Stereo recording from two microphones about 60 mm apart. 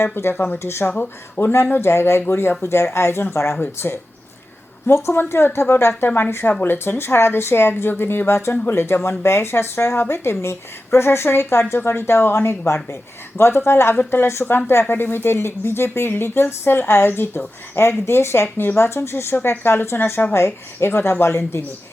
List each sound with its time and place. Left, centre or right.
0.0 s speech: left
0.9 s speech: left
4.9 s speech: left